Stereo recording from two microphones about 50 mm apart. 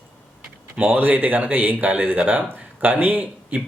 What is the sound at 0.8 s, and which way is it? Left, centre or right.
Speech, right.